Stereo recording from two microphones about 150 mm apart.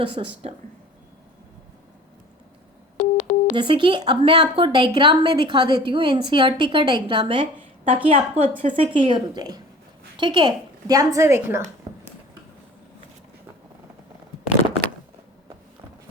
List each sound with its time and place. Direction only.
0.0 s a woman's voice: 35° right (ahead or behind)
3.0 s a sound: 50° left (ahead or behind)
3.5 s a woman's voice: 30° right (ahead or behind); by 11.6 s 15° right (ahead or behind)